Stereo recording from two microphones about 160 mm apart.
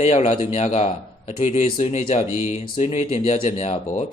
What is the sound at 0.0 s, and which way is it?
A man's voice, 40° left (ahead or behind).